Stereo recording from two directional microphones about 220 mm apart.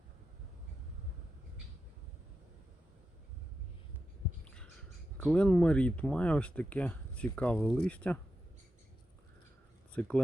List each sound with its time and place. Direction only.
4.4 s a sound: 5° left (ahead or behind)
5.1 s speech: 5° left (ahead or behind)
9.9 s speech: 5° left (ahead or behind)